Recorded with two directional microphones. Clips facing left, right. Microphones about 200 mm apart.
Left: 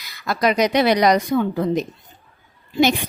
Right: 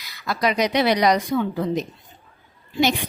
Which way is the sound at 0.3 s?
50° left (ahead or behind).